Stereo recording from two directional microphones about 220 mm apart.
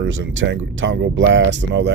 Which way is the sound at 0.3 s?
60° right (ahead or behind).